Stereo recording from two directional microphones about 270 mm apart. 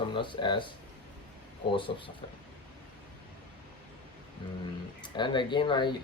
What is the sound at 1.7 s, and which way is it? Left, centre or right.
Speech, centre.